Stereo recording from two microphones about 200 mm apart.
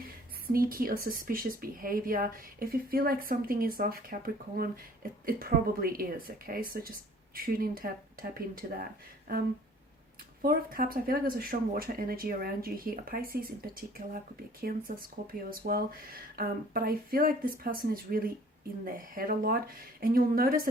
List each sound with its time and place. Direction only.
0.4 s speech: 45° right (ahead or behind)
10.4 s speech: 45° right (ahead or behind)